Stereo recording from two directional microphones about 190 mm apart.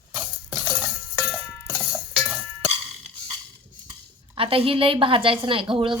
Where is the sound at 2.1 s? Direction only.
5° left (ahead or behind).